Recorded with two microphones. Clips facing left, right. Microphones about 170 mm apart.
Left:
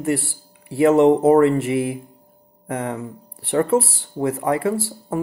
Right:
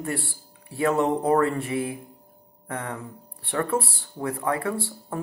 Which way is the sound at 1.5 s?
80° left.